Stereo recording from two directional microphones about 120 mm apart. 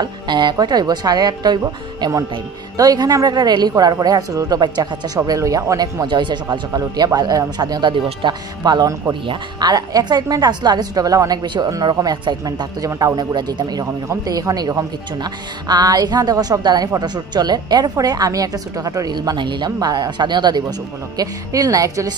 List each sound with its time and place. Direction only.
0.0 s a woman's voice: 40° right (ahead or behind)
6.0 s a woman's voice: 40° right (ahead or behind)